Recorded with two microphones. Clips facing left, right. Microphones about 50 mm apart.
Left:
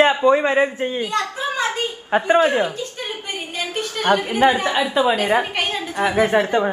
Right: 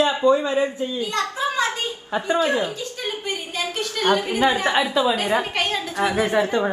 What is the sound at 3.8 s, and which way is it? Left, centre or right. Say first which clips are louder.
A woman's voice: left 2 dB; left.